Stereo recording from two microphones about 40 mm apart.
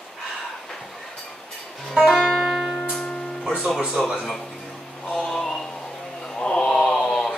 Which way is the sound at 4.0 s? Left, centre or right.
Centre.